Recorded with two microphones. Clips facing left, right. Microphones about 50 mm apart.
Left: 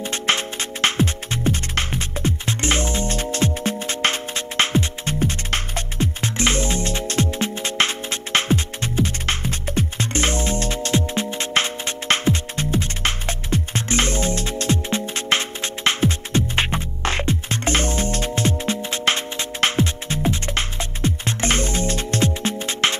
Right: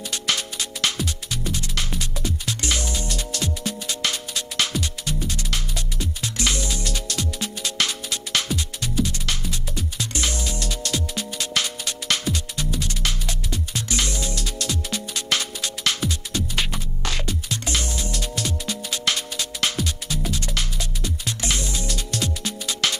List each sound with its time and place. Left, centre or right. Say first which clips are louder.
0.0 s music: left 4 dB; left